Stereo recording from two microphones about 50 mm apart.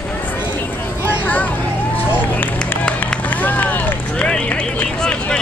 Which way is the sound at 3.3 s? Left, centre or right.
Left.